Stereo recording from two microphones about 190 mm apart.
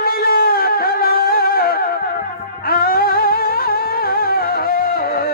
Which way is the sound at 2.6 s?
50° left (ahead or behind).